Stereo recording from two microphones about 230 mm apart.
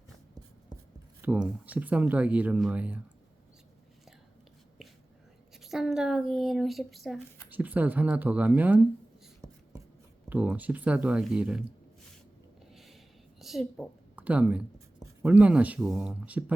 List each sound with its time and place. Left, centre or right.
1.2 s speech: centre
5.5 s speech: centre
9.4 s writing: centre
10.2 s speech: centre
12.7 s a sound: centre
13.4 s a woman's voice: centre